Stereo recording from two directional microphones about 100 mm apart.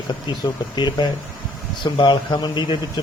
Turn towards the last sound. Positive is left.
turn(degrees=50)  # may be behind; listen again after turning